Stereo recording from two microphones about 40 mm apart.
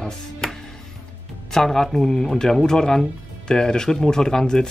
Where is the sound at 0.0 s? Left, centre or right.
Centre.